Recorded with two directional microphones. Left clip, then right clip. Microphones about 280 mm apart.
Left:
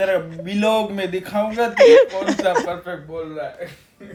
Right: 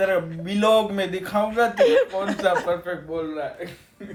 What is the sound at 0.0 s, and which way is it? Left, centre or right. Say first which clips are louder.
A man's voice: left 2 dB; centre.